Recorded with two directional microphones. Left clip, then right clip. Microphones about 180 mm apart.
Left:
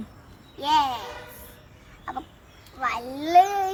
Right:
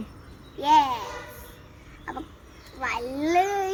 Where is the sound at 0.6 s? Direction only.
25° left (ahead or behind).